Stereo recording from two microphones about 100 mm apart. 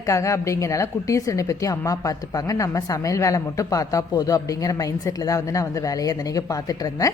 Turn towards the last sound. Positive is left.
turn(degrees=35)  # may be behind; listen again after turning